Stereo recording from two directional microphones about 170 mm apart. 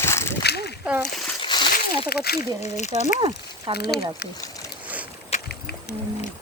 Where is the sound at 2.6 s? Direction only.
40° left (ahead or behind).